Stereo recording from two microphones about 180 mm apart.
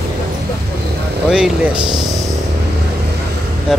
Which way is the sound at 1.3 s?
5° right (ahead or behind).